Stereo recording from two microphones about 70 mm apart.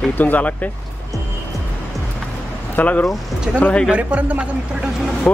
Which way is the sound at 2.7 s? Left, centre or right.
Left.